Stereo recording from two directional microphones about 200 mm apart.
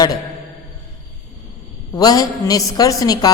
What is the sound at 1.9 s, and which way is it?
Speech, 20° left (ahead or behind).